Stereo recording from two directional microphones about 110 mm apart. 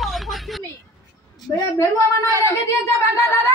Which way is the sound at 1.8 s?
25° left (ahead or behind).